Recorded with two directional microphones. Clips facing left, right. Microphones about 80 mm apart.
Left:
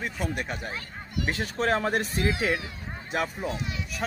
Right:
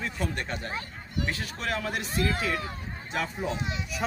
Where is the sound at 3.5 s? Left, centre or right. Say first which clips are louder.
Right 1 dB; right.